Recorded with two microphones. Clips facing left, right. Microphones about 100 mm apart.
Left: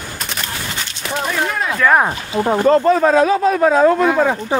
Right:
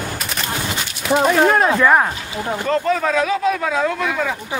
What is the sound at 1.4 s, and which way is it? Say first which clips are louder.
Speech: right 7 dB; 45° right (ahead or behind).